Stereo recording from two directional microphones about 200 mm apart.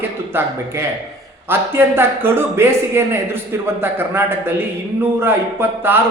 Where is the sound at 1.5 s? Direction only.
10° right (ahead or behind).